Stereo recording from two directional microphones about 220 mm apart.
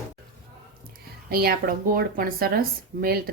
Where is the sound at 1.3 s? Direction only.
45° right (ahead or behind).